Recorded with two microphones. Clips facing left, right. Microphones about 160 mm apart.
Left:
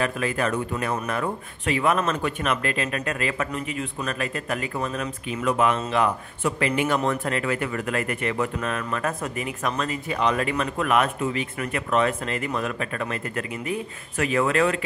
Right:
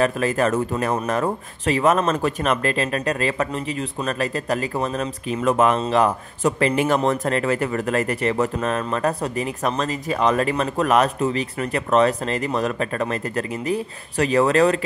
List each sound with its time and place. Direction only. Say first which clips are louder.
0.0 s speech: right 5 dB; 40° right (ahead or behind)